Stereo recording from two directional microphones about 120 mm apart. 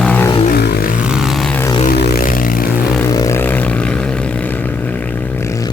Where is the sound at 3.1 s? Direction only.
25° left (ahead or behind).